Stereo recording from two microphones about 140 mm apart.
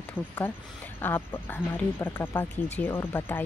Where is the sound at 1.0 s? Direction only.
15° left (ahead or behind).